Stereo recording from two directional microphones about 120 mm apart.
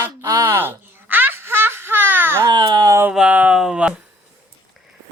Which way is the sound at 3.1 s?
10° right (ahead or behind).